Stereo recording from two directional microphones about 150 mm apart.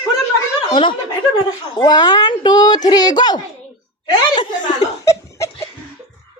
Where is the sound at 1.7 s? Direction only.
30° left (ahead or behind).